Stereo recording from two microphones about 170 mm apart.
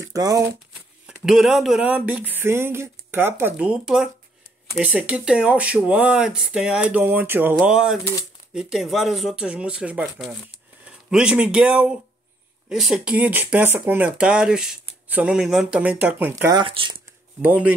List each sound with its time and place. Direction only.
0.0 s speech: 20° right (ahead or behind)
1.0 s speech: 5° right (ahead or behind)
16.5 s speech: 30° right (ahead or behind)
17.4 s speech: 10° right (ahead or behind)